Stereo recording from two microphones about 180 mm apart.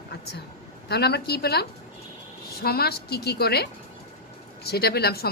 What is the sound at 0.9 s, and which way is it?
A woman's voice, 65° left (ahead or behind).